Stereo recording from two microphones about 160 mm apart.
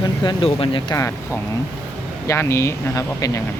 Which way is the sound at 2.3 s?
15° left (ahead or behind).